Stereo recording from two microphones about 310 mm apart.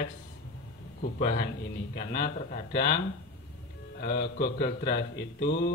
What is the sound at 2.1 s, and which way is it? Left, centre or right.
Speech, left.